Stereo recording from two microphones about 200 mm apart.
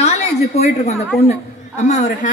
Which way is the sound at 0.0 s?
30° left (ahead or behind).